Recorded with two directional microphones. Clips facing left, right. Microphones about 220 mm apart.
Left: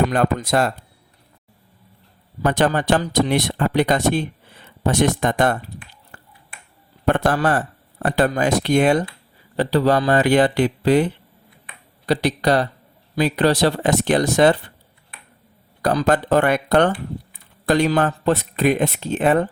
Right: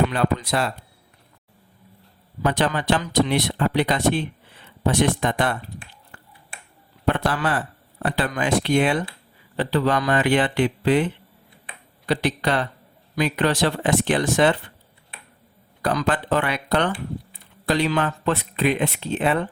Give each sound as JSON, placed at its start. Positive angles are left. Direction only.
{"t": 0.1, "sound": "speech", "side_deg": 45}
{"t": 2.4, "sound": "speech", "side_deg": 45}
{"t": 6.1, "sound": "finger snapping", "side_deg": 40}
{"t": 7.1, "sound": "a man's voice", "side_deg": 45}
{"t": 15.8, "sound": "speech", "side_deg": 40}